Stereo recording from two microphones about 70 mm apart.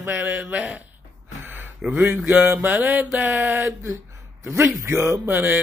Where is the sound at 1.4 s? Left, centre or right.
Right.